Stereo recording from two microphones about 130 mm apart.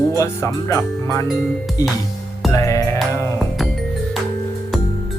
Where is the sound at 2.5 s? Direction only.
25° left (ahead or behind).